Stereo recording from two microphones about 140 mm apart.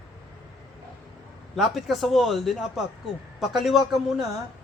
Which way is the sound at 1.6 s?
Centre (ahead or behind).